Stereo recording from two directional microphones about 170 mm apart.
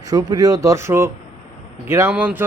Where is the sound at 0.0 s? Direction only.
20° right (ahead or behind).